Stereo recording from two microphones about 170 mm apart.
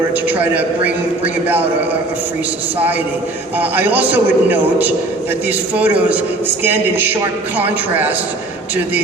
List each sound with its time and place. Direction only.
0.3 s a man's voice: 10° right (ahead or behind)
3.6 s a man's voice: 10° right (ahead or behind)